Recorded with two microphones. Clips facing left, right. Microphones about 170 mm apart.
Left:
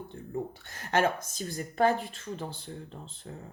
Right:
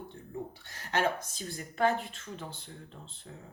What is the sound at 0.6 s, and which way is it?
Speech, 50° left (ahead or behind).